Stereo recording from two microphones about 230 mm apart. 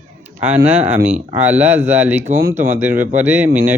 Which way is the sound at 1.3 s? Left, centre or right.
Centre.